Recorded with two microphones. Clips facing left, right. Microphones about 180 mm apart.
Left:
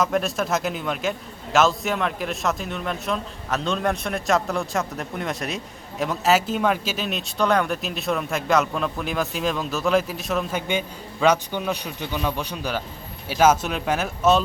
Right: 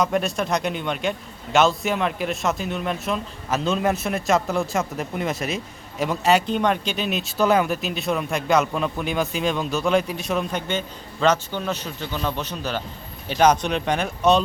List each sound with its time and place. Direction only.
0.0 s speech: centre (ahead or behind)
10.7 s a man's voice: 10° left (ahead or behind)